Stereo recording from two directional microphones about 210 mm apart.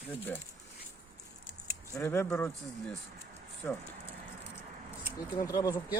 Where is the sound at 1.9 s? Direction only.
10° left (ahead or behind).